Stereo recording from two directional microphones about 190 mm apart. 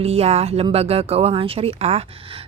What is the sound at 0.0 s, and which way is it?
A woman's voice, 35° right (ahead or behind).